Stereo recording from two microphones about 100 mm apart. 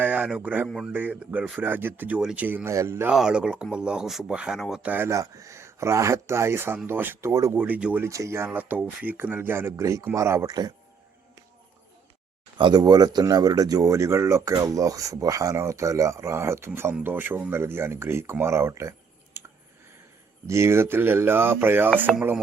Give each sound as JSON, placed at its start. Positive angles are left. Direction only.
{"t": 0.0, "sound": "speech", "side_deg": -15}
{"t": 2.6, "sound": "speech", "side_deg": -25}
{"t": 3.1, "sound": "speech", "side_deg": -5}
{"t": 4.9, "sound": "speech", "side_deg": -20}
{"t": 5.1, "sound": "speech", "side_deg": -35}
{"t": 7.5, "sound": "speech", "side_deg": -15}
{"t": 8.0, "sound": "speech", "side_deg": -30}
{"t": 10.5, "sound": "speech", "side_deg": -40}
{"t": 12.5, "sound": "speech", "side_deg": -50}
{"t": 20.5, "sound": "speech", "side_deg": -25}